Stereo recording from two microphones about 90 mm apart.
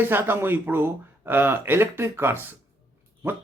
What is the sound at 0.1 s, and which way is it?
Speech, 25° right (ahead or behind).